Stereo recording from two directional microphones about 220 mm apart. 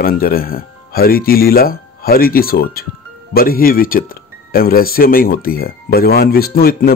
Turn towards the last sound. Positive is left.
turn(degrees=45)  # may be behind; listen again after turning